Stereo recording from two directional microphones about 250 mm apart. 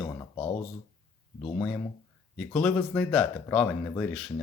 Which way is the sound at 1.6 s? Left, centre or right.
Centre.